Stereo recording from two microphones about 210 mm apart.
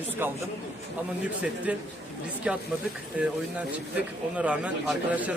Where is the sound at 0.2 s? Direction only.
10° right (ahead or behind).